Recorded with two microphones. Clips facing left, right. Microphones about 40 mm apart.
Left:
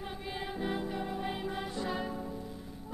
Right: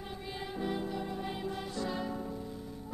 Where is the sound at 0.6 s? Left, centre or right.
Left.